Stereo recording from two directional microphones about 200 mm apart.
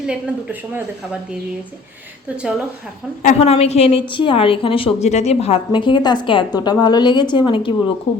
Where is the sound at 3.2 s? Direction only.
30° left (ahead or behind).